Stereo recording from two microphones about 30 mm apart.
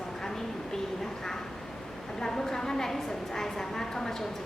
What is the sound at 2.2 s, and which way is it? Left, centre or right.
A woman's voice, centre.